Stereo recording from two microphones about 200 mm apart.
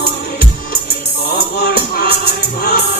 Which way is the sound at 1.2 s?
50° left (ahead or behind).